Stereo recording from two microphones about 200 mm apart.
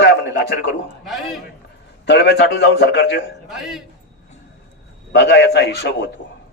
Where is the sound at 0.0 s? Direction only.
60° left (ahead or behind).